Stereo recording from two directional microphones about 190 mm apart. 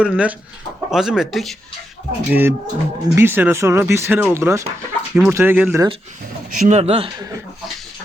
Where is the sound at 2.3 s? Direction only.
10° right (ahead or behind).